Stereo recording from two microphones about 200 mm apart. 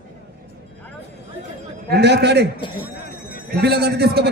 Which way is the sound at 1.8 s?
55° right (ahead or behind).